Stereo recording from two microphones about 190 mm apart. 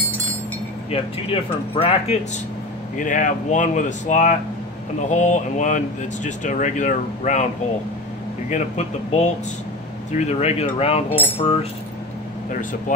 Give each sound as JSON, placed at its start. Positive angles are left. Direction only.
{"t": 0.9, "sound": "speech", "side_deg": 30}
{"t": 3.0, "sound": "speech", "side_deg": 40}
{"t": 8.5, "sound": "speech", "side_deg": 40}